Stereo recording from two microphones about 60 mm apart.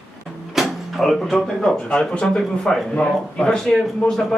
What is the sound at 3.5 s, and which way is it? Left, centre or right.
Speech, centre.